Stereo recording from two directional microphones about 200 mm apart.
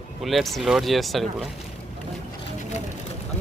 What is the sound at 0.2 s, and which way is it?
Speech, centre (ahead or behind).